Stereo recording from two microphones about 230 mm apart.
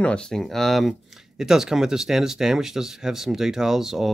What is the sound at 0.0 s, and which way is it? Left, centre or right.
Speech, centre.